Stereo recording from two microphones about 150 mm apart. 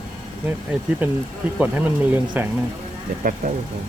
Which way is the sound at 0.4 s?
10° right (ahead or behind).